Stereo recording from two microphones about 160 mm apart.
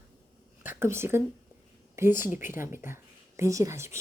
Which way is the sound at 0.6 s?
15° right (ahead or behind).